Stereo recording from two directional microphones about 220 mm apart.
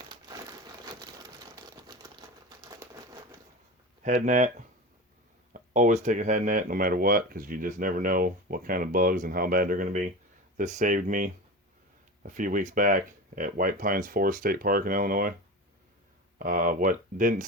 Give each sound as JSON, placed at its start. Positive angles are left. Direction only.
{"t": 1.0, "sound": "crumpling", "side_deg": -15}
{"t": 4.0, "sound": "speech", "side_deg": -35}
{"t": 5.5, "sound": "speech", "side_deg": -35}
{"t": 16.4, "sound": "speech", "side_deg": -40}